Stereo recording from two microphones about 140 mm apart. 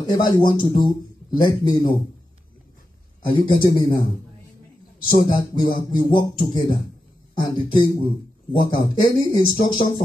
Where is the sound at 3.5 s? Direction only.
35° left (ahead or behind).